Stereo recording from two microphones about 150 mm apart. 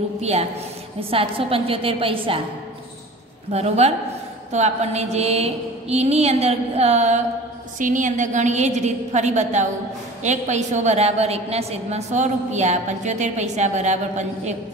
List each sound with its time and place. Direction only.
0.2 s a woman's voice: 45° right (ahead or behind)
3.5 s a woman's voice: 45° right (ahead or behind)
7.8 s a woman's voice: 60° right (ahead or behind)